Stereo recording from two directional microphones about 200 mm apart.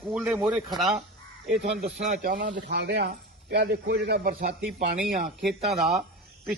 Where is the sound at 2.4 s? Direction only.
60° right (ahead or behind).